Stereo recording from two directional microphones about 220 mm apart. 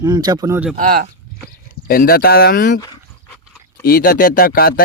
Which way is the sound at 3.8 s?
40° left (ahead or behind).